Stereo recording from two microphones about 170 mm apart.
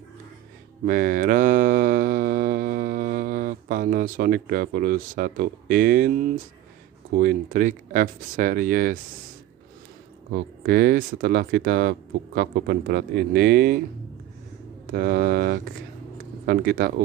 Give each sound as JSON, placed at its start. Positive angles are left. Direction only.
{"t": 0.8, "sound": "mantra", "side_deg": -55}
{"t": 7.1, "sound": "speech", "side_deg": -55}
{"t": 10.6, "sound": "speech", "side_deg": -70}
{"t": 14.9, "sound": "speech", "side_deg": -65}